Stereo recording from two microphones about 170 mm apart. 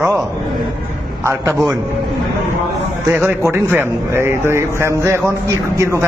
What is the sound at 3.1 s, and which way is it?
A man's voice, 10° right (ahead or behind).